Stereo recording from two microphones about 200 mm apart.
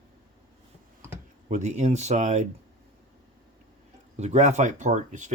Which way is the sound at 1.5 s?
35° right (ahead or behind).